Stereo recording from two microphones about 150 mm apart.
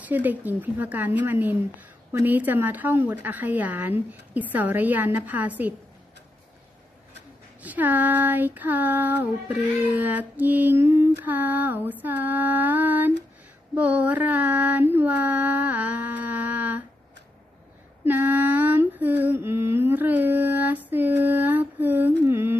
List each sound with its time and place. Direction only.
0.0 s speech: 10° right (ahead or behind)
7.6 s speech: 10° right (ahead or behind)
18.0 s a sound: 10° right (ahead or behind)